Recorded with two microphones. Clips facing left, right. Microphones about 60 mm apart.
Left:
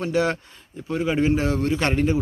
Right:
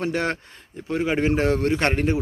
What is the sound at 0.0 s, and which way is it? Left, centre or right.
A man's voice, right.